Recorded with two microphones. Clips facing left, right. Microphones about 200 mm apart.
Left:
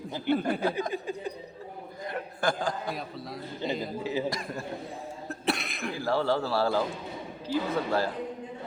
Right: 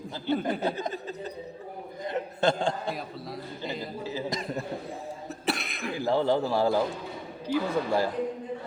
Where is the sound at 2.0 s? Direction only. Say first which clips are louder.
Right 5 dB; 20° right (ahead or behind).